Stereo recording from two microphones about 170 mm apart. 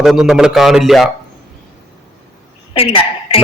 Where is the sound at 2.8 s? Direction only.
35° left (ahead or behind).